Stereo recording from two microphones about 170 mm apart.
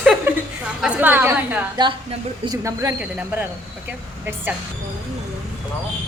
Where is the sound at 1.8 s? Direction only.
25° right (ahead or behind).